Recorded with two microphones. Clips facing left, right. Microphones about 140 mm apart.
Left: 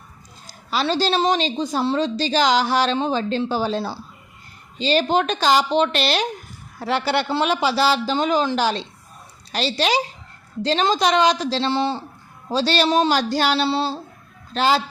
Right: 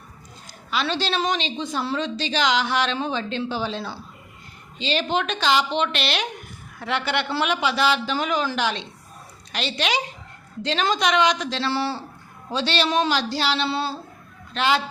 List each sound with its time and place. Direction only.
0.4 s a woman's voice: 35° left (ahead or behind)
11.7 s speech: 20° left (ahead or behind)
12.5 s a woman's voice: 35° left (ahead or behind)
13.1 s a sound: 50° left (ahead or behind)
13.7 s a woman's voice: 30° left (ahead or behind)